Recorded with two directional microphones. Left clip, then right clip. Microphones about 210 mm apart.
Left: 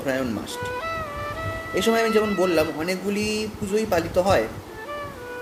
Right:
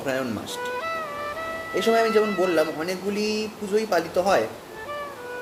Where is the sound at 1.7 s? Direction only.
15° left (ahead or behind).